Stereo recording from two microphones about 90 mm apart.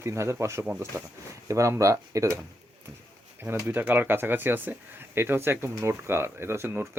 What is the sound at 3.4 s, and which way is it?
Speech, 25° right (ahead or behind).